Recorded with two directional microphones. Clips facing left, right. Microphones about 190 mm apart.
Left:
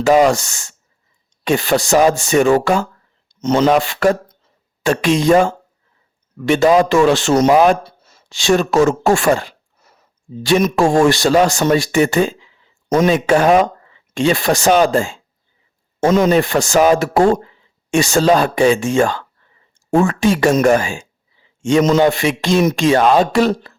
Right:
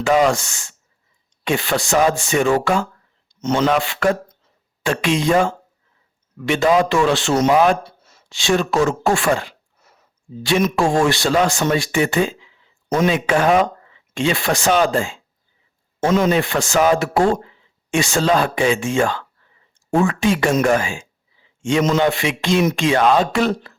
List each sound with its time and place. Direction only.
0.0 s a man's voice: 40° left (ahead or behind)